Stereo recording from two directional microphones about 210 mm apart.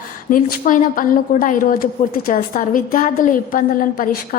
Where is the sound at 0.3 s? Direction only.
40° left (ahead or behind).